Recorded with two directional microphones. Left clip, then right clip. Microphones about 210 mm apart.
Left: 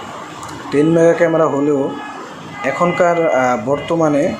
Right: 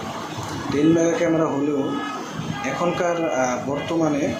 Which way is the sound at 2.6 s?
45° left (ahead or behind).